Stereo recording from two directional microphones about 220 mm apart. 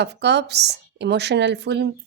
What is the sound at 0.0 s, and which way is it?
A woman's voice, 50° right (ahead or behind).